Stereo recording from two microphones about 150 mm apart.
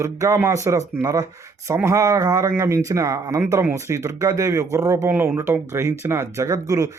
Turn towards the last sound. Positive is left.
turn(degrees=-20)  # may be behind; listen again after turning